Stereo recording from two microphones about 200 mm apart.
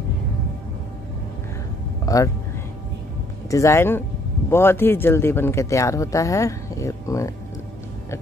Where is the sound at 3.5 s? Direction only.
15° left (ahead or behind).